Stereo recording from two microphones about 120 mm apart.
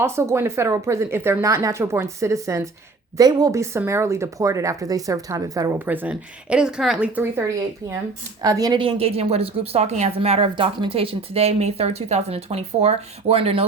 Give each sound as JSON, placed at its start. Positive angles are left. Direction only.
{"t": 0.0, "sound": "speech", "side_deg": -20}
{"t": 5.8, "sound": "speech", "side_deg": -15}
{"t": 8.4, "sound": "a woman's voice", "side_deg": -30}
{"t": 8.8, "sound": "speech", "side_deg": -55}